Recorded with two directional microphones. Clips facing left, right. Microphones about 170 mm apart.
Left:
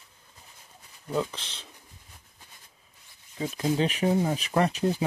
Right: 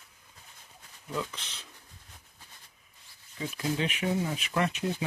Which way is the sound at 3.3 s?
35° left (ahead or behind).